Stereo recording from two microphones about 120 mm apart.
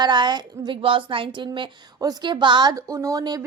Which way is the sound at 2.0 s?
35° right (ahead or behind).